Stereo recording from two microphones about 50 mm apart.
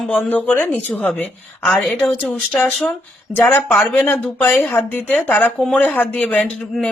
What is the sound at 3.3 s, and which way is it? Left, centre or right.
Speech, left.